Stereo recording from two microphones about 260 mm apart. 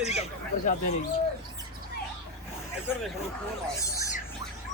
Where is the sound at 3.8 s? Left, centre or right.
Centre.